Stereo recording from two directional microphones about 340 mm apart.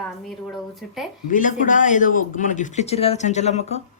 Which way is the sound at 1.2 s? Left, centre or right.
Left.